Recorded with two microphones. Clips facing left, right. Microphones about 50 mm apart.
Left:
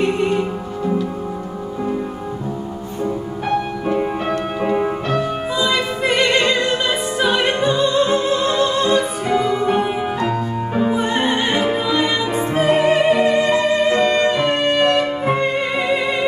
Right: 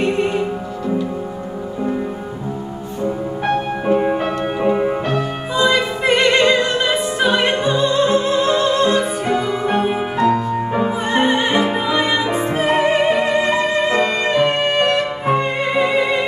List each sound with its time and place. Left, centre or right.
3.8 s music: right
4.3 s music: centre
11.7 s music: right